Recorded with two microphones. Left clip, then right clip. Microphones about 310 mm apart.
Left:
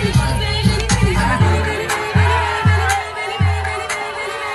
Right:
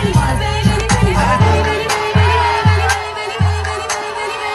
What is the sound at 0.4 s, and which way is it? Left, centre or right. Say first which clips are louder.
Music: right 2 dB; right.